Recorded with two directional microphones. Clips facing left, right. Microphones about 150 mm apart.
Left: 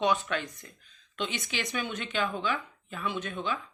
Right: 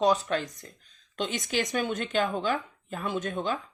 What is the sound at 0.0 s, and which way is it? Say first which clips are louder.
Speech: right 3 dB; 35° right (ahead or behind).